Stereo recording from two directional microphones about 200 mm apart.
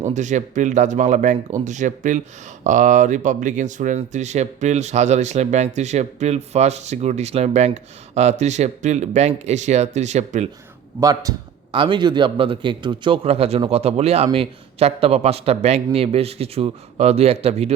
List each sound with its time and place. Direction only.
0.0 s speech: 35° right (ahead or behind)
11.0 s a man's voice: 15° right (ahead or behind)